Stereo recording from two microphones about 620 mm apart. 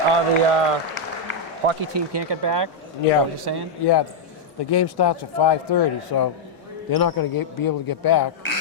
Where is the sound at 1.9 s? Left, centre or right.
Right.